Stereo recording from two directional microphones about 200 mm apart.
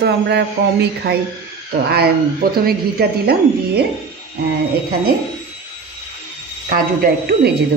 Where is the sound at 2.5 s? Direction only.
50° right (ahead or behind).